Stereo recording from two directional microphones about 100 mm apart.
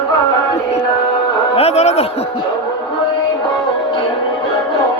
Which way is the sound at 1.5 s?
90° left.